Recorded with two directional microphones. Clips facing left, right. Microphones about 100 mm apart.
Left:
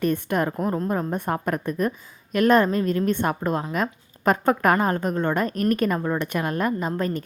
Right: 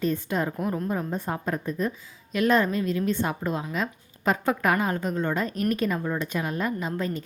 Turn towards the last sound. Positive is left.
turn(degrees=50)  # may be behind; listen again after turning